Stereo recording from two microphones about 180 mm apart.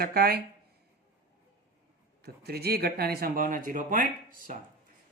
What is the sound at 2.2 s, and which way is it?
Speech, 60° right (ahead or behind).